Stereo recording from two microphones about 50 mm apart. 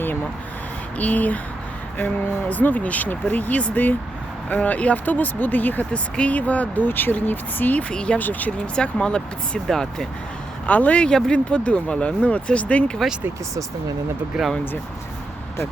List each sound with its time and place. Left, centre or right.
0.9 s speech: left
2.5 s speech: left
5.0 s speech: left
6.8 s speech: left
7.9 s speech: left
8.2 s speech: left
8.5 s speech: centre
9.6 s speech: centre
10.7 s speech: left
13.0 s speech: centre
14.3 s speech: centre